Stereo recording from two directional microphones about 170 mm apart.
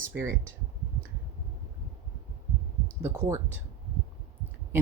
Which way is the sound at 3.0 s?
15° right (ahead or behind).